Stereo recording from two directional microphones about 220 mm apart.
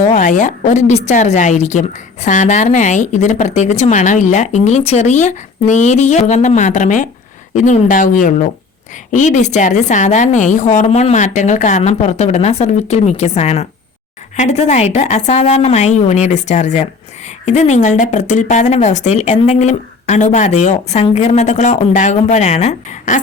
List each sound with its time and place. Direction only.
0.0 s speech: 35° left (ahead or behind)